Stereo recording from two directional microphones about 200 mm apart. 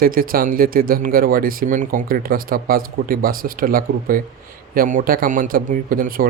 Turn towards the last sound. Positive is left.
turn(degrees=-45)  # may be behind; listen again after turning